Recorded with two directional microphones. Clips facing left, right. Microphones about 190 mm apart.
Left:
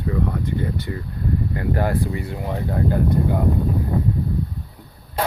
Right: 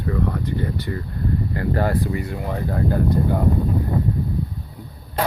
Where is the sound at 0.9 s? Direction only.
15° left (ahead or behind).